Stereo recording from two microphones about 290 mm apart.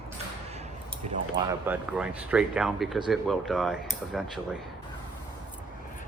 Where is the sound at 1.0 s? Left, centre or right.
Right.